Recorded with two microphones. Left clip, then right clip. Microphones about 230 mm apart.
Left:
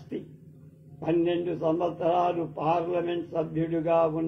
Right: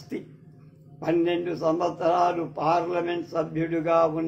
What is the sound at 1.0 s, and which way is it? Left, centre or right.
A man's voice, right.